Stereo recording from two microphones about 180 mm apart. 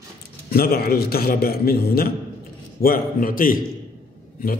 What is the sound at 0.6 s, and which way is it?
A man's voice, 60° left (ahead or behind).